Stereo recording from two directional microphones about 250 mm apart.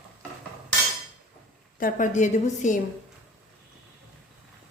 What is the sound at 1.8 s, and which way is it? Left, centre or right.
A woman's voice, left.